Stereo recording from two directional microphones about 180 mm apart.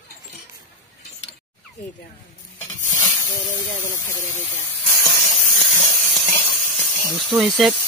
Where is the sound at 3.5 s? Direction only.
15° left (ahead or behind).